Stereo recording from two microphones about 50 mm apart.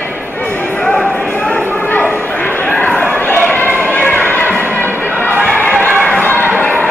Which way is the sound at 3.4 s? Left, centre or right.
Left.